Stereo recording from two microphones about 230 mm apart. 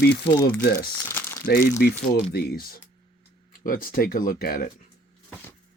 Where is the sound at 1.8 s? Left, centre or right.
Left.